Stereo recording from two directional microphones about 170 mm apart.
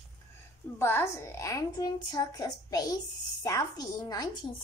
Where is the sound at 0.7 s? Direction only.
15° left (ahead or behind).